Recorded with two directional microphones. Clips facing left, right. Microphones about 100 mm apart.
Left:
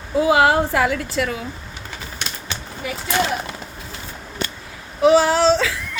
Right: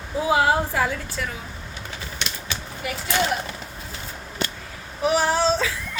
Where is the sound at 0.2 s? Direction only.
75° left (ahead or behind).